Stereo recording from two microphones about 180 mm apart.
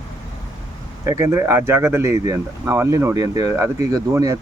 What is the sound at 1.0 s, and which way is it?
Speech, 15° right (ahead or behind).